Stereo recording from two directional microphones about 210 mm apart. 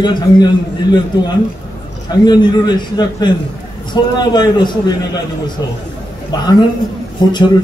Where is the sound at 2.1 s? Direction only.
20° left (ahead or behind).